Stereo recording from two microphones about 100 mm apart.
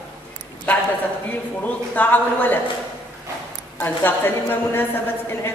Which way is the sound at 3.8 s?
20° left (ahead or behind).